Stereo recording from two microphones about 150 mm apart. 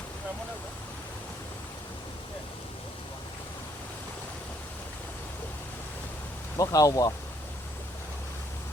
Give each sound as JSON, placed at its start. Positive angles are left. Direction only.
{"t": 6.6, "sound": "speech", "side_deg": 20}